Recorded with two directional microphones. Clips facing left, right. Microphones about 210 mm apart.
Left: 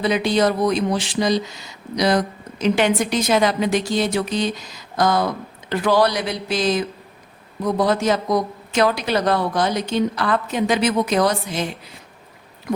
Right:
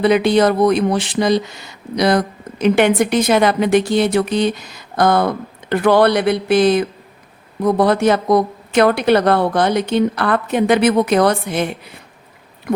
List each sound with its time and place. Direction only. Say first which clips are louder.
0.0 s speech: right 5 dB; 60° right (ahead or behind)